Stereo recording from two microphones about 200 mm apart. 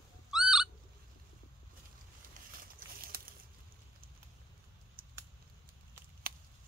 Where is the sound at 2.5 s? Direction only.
45° right (ahead or behind).